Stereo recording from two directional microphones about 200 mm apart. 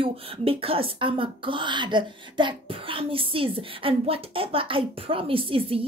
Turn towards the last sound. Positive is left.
turn(degrees=-25)  # may be behind; listen again after turning